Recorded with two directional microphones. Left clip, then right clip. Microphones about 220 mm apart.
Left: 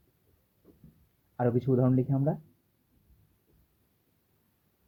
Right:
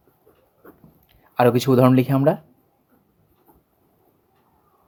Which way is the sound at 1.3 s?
30° right (ahead or behind).